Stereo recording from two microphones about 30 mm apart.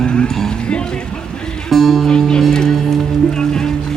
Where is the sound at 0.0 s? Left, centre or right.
Left.